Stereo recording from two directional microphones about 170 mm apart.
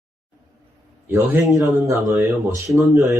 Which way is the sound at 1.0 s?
15° right (ahead or behind).